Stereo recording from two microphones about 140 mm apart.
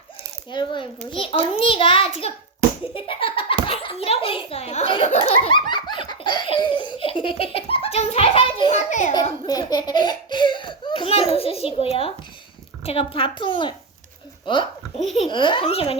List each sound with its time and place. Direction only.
0.5 s a child's voice: 35° left (ahead or behind)
5.5 s laughter: 30° left (ahead or behind)
8.7 s a child's voice: 60° left (ahead or behind)
9.5 s a child's voice: 30° left (ahead or behind); by 16.0 s 45° left (ahead or behind)